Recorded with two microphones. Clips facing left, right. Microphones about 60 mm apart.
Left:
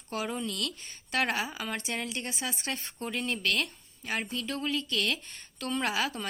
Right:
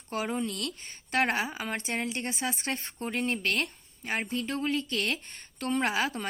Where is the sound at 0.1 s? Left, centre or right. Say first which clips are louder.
Right 2 dB; right.